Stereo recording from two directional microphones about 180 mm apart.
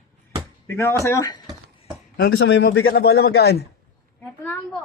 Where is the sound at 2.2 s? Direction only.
80° left; by 3.6 s 65° left (ahead or behind).